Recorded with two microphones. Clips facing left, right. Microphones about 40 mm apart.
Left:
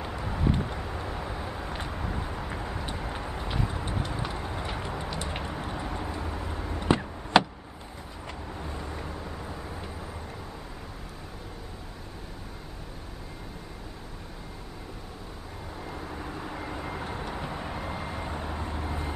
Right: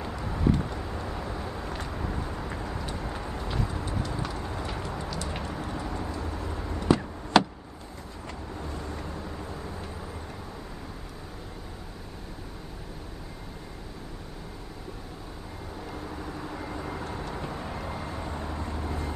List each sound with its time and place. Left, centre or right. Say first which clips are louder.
0.0 s vehicle: right 2 dB; centre
5.5 s a sound: even; centre
7.3 s vehicle: even; centre
15.8 s vehicle: even; centre